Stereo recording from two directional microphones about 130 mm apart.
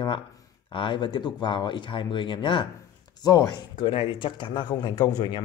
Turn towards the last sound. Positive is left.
turn(degrees=30)  # may be behind; listen again after turning